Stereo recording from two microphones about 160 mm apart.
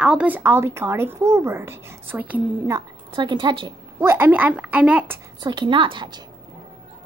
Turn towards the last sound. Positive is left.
turn(degrees=-25)  # may be behind; listen again after turning